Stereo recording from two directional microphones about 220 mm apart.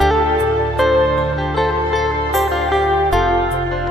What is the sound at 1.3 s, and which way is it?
Music, centre (ahead or behind).